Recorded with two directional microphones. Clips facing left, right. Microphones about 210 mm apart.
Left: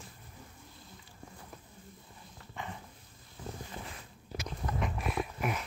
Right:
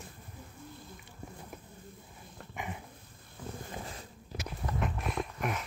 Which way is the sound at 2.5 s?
15° right (ahead or behind).